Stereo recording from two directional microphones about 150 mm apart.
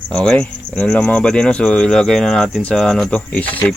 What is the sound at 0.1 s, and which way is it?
Speech, 5° left (ahead or behind).